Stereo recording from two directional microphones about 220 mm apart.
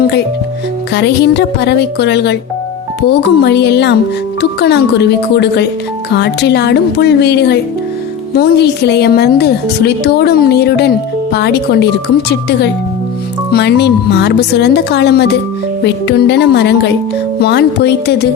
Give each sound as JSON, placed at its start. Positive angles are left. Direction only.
{"t": 0.9, "sound": "a woman's voice", "side_deg": 50}